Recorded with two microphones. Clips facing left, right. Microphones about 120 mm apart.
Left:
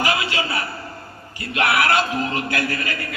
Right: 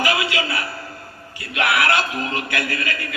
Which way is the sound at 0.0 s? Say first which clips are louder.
Right 1 dB; 35° left (ahead or behind).